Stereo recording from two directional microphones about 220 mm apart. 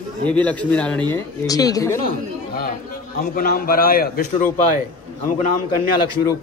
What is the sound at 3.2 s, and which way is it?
A man's voice, 40° left (ahead or behind).